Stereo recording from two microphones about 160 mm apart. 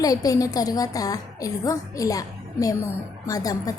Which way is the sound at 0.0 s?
20° left (ahead or behind).